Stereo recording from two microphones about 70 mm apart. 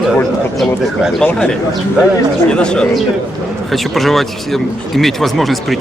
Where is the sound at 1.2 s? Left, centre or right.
Centre.